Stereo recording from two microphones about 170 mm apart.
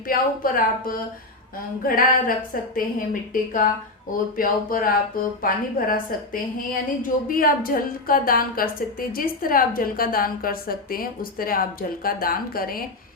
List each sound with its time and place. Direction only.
0.1 s a woman's voice: 55° left (ahead or behind)
4.4 s a woman's voice: 55° left (ahead or behind)